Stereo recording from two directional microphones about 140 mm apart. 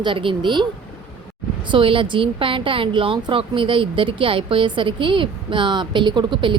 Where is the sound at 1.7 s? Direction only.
40° right (ahead or behind).